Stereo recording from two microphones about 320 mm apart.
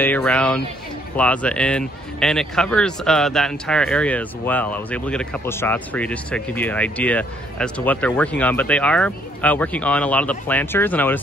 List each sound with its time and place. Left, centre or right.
0.0 s speech: centre